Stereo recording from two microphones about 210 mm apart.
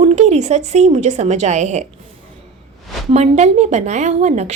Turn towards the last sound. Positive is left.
turn(degrees=-35)  # may be behind; listen again after turning